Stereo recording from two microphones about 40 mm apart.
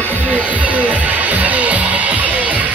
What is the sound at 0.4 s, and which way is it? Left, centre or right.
Music, right.